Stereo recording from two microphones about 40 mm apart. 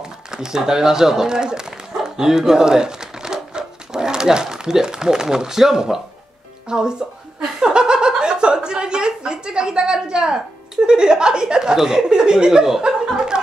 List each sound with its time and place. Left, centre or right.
0.0 s speech: centre
6.7 s chuckle: centre
9.9 s speech: right
12.8 s a sound: centre